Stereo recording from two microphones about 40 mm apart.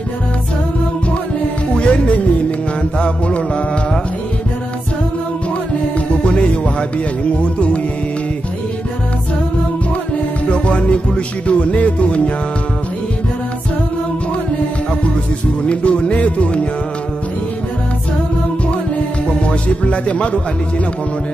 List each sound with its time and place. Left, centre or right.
1.8 s music: left
5.9 s music: left
10.5 s music: left
15.6 s music: left
19.2 s music: left